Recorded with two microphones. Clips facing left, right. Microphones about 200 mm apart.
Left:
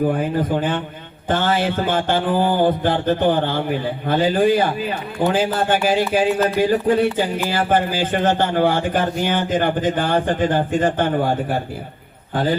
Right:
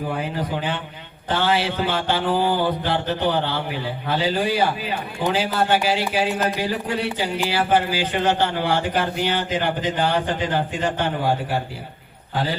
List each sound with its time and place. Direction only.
0.1 s a man's voice: 50° left (ahead or behind)